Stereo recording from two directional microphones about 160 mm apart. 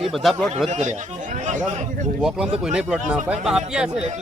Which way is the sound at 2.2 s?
5° right (ahead or behind).